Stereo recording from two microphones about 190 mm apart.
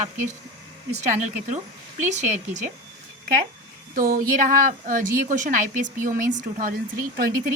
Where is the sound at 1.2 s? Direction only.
40° right (ahead or behind).